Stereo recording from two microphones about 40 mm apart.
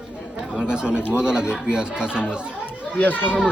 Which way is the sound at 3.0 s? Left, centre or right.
Left.